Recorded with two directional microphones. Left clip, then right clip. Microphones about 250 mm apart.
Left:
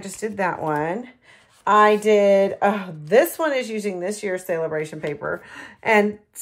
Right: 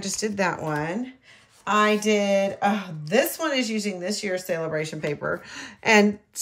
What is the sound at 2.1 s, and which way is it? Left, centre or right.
A woman's voice, centre.